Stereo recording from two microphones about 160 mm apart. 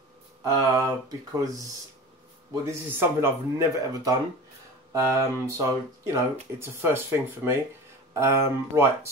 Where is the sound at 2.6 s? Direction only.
15° right (ahead or behind).